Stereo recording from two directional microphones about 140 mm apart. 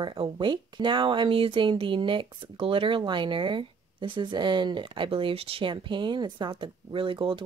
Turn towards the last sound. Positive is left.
turn(degrees=-35)  # may be behind; listen again after turning